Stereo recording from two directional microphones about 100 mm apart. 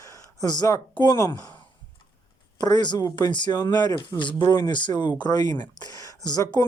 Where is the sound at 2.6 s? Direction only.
40° left (ahead or behind).